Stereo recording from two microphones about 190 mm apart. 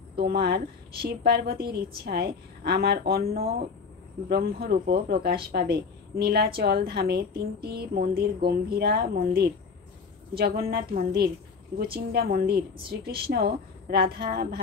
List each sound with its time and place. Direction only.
0.2 s a woman's voice: 55° right (ahead or behind)